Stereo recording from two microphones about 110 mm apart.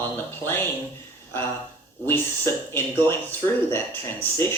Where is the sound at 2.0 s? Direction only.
20° left (ahead or behind).